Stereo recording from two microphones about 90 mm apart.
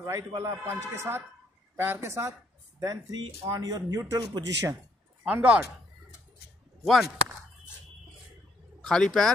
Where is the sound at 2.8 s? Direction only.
45° right (ahead or behind).